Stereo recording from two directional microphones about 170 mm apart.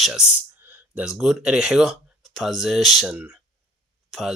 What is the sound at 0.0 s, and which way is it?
Speech, 5° right (ahead or behind).